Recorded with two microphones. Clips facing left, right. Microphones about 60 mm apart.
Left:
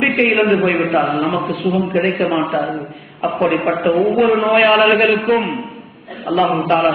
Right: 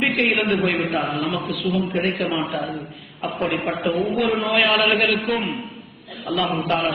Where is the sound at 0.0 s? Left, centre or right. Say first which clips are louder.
Left 6 dB; left.